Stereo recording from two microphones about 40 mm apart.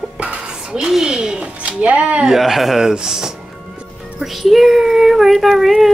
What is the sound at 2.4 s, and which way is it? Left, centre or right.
Speech, centre.